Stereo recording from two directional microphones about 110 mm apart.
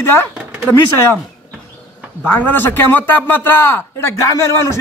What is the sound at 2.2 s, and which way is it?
A man's voice, 15° left (ahead or behind).